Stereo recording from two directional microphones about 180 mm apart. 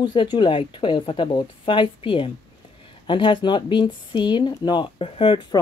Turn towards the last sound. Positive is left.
turn(degrees=25)  # may be behind; listen again after turning